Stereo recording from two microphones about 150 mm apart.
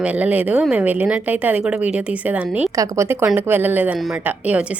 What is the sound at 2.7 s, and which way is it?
A woman's voice, 20° right (ahead or behind).